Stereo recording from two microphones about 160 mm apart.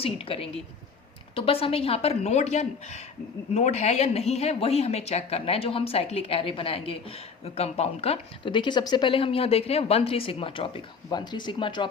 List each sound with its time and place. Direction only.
0.0 s a woman's voice: 35° left (ahead or behind)